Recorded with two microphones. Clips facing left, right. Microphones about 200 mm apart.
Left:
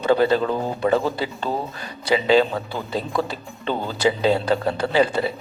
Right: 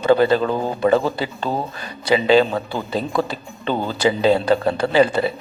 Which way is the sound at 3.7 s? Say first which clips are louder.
Right 2 dB; 70° right (ahead or behind).